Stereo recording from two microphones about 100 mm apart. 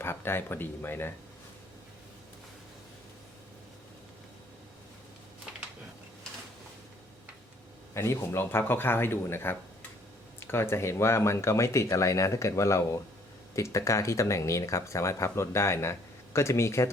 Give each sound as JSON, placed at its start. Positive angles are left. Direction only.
{"t": 0.0, "sound": "speech", "side_deg": 25}
{"t": 7.9, "sound": "speech", "side_deg": 25}